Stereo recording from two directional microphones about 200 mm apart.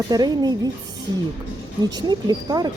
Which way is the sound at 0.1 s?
20° right (ahead or behind).